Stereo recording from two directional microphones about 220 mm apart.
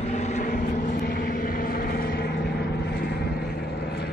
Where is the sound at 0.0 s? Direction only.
30° left (ahead or behind).